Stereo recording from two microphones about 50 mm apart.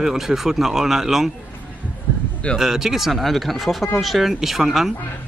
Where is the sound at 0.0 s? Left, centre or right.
Centre.